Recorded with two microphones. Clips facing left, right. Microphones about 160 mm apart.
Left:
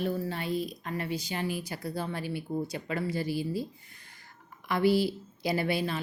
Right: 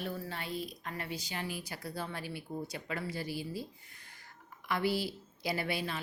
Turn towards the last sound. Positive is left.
turn(degrees=30)  # may be behind; listen again after turning